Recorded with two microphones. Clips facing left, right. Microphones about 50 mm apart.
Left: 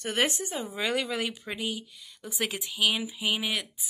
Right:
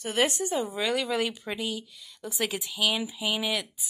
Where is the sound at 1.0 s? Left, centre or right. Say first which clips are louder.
Right 3 dB; centre.